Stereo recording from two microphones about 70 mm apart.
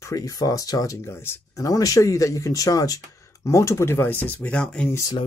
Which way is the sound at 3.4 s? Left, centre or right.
Left.